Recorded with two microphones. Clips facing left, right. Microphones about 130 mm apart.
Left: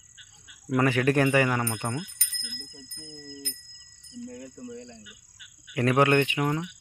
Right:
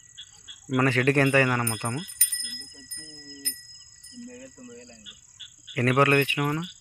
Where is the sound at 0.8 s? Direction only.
15° left (ahead or behind).